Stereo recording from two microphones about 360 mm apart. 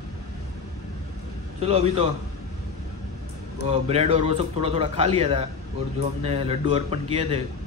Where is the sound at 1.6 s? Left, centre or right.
Centre.